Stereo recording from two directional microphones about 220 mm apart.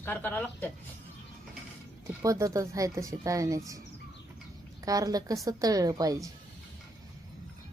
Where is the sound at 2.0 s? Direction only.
15° right (ahead or behind).